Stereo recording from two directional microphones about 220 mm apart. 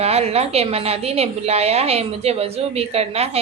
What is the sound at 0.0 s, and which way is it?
A woman's voice, 30° right (ahead or behind).